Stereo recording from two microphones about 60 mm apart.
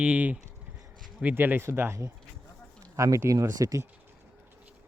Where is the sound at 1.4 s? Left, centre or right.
Right.